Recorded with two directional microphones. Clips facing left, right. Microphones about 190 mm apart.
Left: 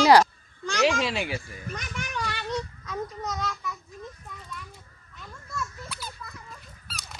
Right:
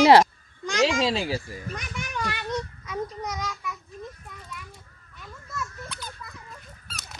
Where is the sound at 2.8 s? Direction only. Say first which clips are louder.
Right 1 dB; 10° right (ahead or behind).